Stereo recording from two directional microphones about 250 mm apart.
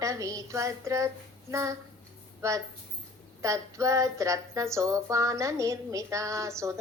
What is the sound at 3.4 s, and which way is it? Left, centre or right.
Speech, centre.